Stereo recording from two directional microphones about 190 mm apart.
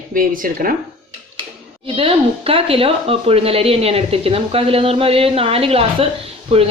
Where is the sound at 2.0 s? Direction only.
30° right (ahead or behind).